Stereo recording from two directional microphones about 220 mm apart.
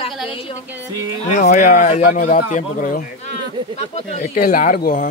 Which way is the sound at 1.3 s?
35° left (ahead or behind).